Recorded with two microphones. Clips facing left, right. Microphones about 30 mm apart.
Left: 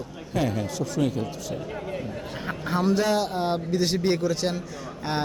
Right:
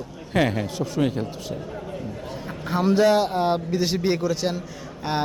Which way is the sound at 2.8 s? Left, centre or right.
Centre.